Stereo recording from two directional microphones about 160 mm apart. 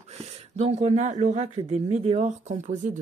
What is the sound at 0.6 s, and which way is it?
Speech, 45° right (ahead or behind).